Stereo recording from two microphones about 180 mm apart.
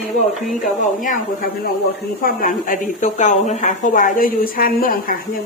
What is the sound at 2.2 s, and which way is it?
A woman's voice, 50° left (ahead or behind).